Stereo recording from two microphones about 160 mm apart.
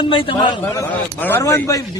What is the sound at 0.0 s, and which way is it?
Speech, 30° left (ahead or behind).